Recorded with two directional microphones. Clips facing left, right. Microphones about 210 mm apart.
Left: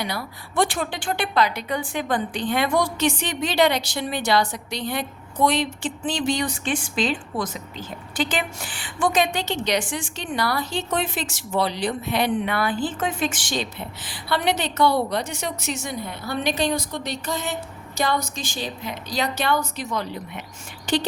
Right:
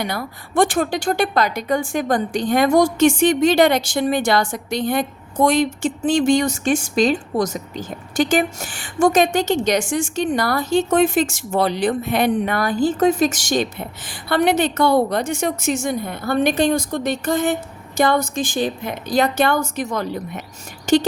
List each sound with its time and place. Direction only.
0.0 s a woman's voice: 50° right (ahead or behind)